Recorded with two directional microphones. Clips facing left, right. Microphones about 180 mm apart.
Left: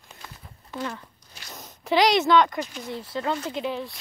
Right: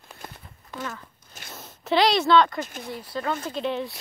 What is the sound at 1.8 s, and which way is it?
Speech, 15° left (ahead or behind).